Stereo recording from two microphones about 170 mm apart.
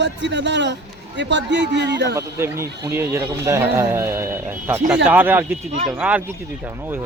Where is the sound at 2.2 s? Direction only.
15° right (ahead or behind).